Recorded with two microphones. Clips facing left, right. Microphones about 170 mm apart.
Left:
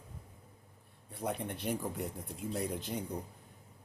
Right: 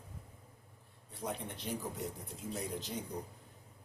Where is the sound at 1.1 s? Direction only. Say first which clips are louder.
Left 4 dB; 55° left (ahead or behind).